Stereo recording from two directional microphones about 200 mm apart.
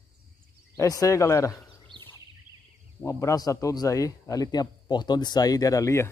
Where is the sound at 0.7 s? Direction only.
15° left (ahead or behind).